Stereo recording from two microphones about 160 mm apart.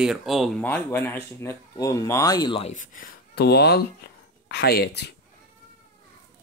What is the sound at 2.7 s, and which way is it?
Speech, 55° left (ahead or behind).